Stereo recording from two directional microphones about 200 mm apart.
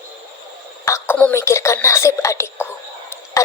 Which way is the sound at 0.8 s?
10° left (ahead or behind).